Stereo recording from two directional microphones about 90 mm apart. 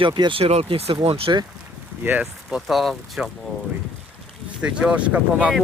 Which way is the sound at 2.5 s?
5° right (ahead or behind).